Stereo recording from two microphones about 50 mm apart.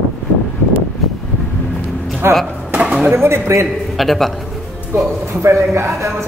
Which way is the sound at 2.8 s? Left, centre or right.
Right.